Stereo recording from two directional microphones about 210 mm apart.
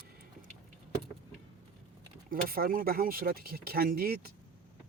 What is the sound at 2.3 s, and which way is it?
Speech, 45° right (ahead or behind).